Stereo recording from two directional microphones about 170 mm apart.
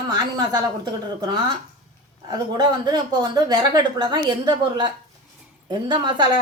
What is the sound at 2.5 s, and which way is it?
A woman's voice, 25° right (ahead or behind).